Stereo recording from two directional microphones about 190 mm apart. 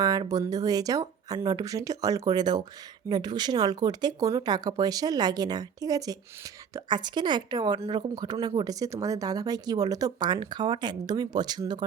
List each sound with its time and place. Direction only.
0.0 s speech: 20° right (ahead or behind)